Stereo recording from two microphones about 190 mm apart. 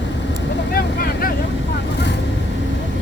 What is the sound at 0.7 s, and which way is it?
Vehicle, 50° left (ahead or behind).